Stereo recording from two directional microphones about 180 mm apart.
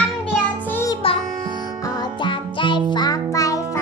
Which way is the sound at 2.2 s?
25° left (ahead or behind).